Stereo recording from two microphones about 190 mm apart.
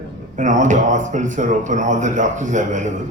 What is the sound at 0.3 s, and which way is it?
Speech, 40° right (ahead or behind).